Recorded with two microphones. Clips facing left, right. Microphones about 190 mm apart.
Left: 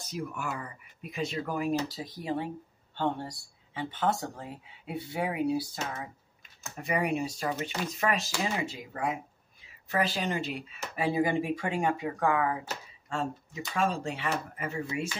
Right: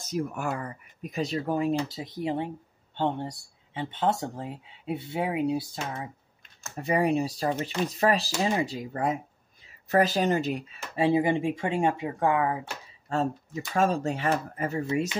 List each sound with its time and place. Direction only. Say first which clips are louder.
0.0 s speech: right 6 dB; 45° right (ahead or behind); by 6.0 s 20° right (ahead or behind)
6.8 s speech: right 5 dB; 35° right (ahead or behind)
11.0 s speech: right 4 dB; 25° right (ahead or behind)
13.7 s speech: right 5 dB; 45° right (ahead or behind)